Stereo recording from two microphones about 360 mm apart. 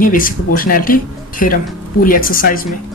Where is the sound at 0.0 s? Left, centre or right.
Left.